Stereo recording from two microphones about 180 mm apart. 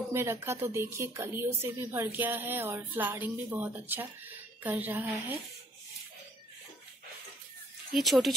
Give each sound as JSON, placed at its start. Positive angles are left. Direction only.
{"t": 0.1, "sound": "a woman's voice", "side_deg": -15}
{"t": 7.9, "sound": "speech", "side_deg": 0}